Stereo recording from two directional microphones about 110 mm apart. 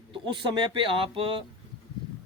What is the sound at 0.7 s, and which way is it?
Speech, 55° right (ahead or behind).